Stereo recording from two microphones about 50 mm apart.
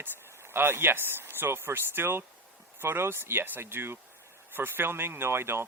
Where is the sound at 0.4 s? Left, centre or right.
Right.